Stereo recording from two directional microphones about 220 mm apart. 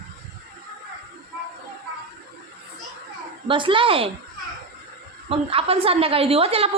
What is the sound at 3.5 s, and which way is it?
Speech, 25° right (ahead or behind).